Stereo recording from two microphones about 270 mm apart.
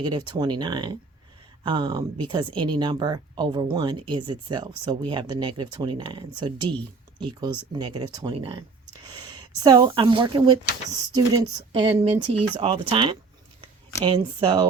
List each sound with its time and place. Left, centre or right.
0.0 s speech: centre